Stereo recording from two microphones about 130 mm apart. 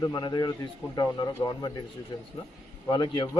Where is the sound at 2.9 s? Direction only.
35° left (ahead or behind).